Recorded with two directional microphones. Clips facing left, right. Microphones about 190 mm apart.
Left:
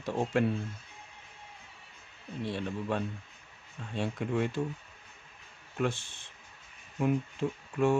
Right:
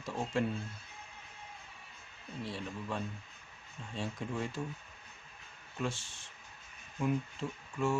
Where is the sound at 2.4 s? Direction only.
65° left (ahead or behind).